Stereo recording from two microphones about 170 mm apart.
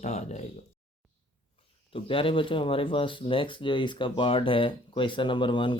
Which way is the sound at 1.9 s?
30° left (ahead or behind).